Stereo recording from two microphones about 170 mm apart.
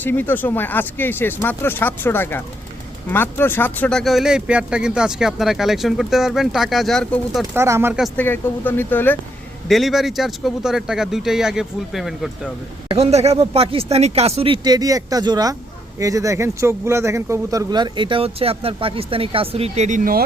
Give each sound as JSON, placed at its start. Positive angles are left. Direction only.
{"t": 0.0, "sound": "speech", "side_deg": 10}
{"t": 7.5, "sound": "speech", "side_deg": -15}
{"t": 8.0, "sound": "speech", "side_deg": 10}
{"t": 9.6, "sound": "speech", "side_deg": 0}
{"t": 12.9, "sound": "speech", "side_deg": -40}